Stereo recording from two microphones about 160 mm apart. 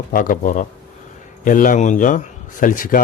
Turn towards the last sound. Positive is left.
turn(degrees=60)  # may be behind; listen again after turning